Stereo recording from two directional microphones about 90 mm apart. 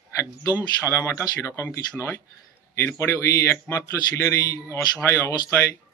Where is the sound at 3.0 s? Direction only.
35° left (ahead or behind).